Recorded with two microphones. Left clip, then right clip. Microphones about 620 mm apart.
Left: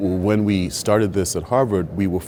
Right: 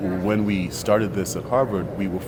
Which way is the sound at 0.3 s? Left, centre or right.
Left.